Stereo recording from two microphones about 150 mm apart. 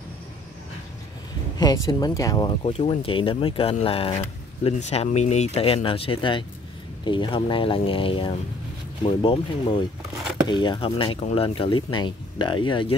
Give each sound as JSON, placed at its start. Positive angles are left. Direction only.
{"t": 1.6, "sound": "speech", "side_deg": 25}
{"t": 2.6, "sound": "speech", "side_deg": 45}